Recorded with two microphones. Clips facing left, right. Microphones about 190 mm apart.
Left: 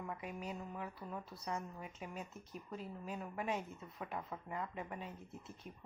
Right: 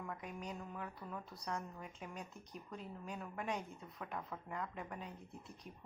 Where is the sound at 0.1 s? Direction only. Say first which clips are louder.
Left 2 dB; 5° left (ahead or behind).